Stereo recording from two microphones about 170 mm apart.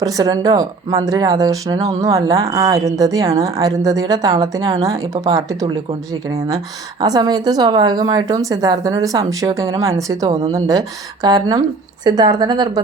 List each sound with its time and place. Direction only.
0.0 s speech: 20° right (ahead or behind)
7.0 s speech: 20° right (ahead or behind)